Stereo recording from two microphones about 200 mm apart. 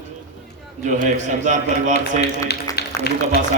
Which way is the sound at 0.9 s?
40° right (ahead or behind).